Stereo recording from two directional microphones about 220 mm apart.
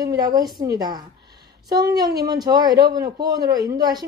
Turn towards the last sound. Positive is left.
turn(degrees=-15)  # may be behind; listen again after turning